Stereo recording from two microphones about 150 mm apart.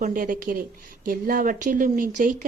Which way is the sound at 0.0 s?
65° right (ahead or behind).